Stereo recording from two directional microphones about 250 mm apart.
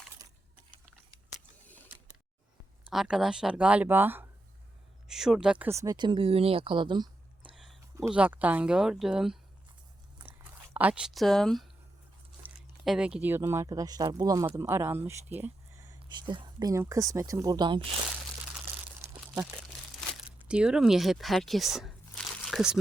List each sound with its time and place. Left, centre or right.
2.9 s speech: centre
7.5 s speech: centre
10.8 s speech: centre
19.1 s crumpling: centre
20.0 s crumpling: centre
20.5 s speech: centre